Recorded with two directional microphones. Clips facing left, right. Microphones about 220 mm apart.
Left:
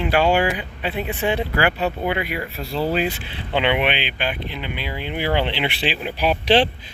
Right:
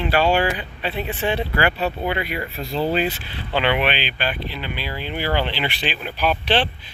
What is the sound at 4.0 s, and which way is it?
Speech, 60° left (ahead or behind).